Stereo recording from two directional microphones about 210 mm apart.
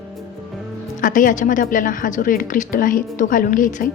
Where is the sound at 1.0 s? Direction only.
40° left (ahead or behind).